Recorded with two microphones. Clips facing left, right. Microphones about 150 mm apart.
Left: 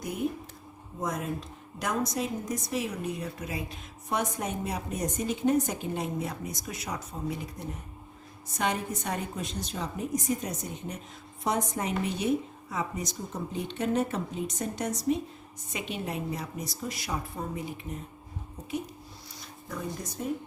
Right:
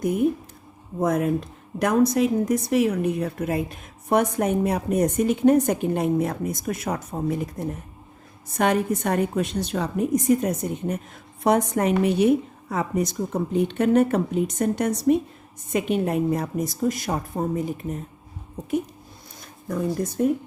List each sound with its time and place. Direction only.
0.0 s a woman's voice: 55° right (ahead or behind)
19.6 s speech: 50° right (ahead or behind)
20.2 s a woman's voice: 60° right (ahead or behind)